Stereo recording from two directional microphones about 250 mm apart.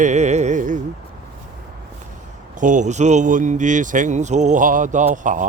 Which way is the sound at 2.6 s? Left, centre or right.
Right.